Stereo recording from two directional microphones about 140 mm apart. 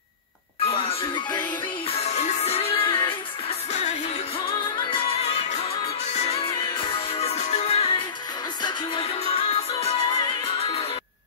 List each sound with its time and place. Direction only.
0.7 s music: 45° left (ahead or behind)
6.0 s music: 55° left (ahead or behind)
8.6 s music: 35° left (ahead or behind)
9.2 s music: 50° left (ahead or behind)